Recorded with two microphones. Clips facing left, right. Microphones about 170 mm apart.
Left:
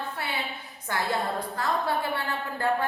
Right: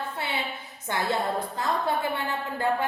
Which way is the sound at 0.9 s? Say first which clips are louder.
Right 2 dB; 20° right (ahead or behind).